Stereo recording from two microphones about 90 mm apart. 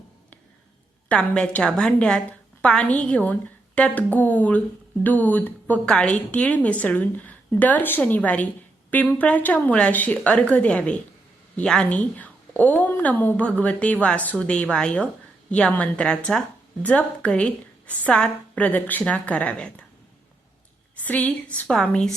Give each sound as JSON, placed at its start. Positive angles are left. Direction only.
{"t": 1.0, "sound": "a woman's voice", "side_deg": 10}
{"t": 21.0, "sound": "a woman's voice", "side_deg": 15}
{"t": 21.7, "sound": "a woman's voice", "side_deg": 5}